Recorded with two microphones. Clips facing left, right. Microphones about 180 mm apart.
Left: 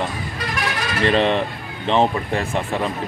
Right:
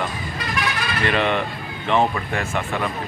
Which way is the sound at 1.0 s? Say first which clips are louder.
Left 4 dB; 30° left (ahead or behind).